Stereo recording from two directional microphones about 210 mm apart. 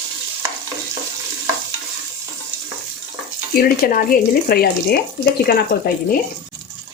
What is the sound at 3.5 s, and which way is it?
Speech, 45° left (ahead or behind).